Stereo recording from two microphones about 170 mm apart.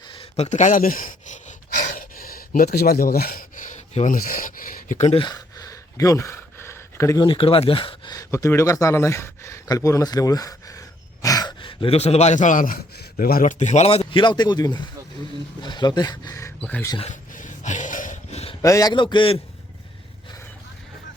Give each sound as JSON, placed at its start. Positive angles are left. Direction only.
{"t": 0.1, "sound": "gasp", "side_deg": 35}
{"t": 7.3, "sound": "speech", "side_deg": 30}
{"t": 17.0, "sound": "a sound", "side_deg": 45}
{"t": 18.6, "sound": "speech", "side_deg": 20}